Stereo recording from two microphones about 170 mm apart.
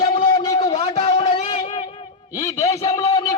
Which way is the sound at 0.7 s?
35° left (ahead or behind).